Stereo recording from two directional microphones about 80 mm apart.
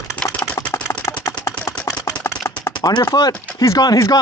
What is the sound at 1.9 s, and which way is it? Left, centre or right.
Chopping, left.